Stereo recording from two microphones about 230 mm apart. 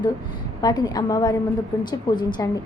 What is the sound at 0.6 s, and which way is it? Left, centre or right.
A woman's voice, centre.